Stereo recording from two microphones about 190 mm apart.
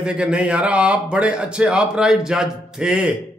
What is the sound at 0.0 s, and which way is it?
A man's voice, 5° right (ahead or behind).